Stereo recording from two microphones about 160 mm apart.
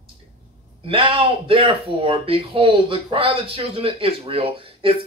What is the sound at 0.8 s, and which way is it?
Speech, 35° right (ahead or behind).